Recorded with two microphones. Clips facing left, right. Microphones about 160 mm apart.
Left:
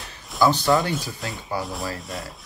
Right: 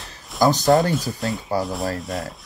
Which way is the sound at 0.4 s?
40° right (ahead or behind).